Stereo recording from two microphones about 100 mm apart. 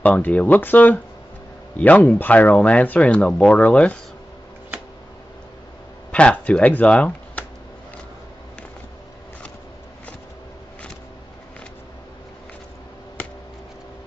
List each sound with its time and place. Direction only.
0.0 s speech: 15° left (ahead or behind)
6.1 s speech: 15° left (ahead or behind)